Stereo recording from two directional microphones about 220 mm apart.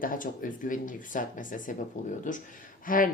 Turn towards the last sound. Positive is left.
turn(degrees=40)  # may be behind; listen again after turning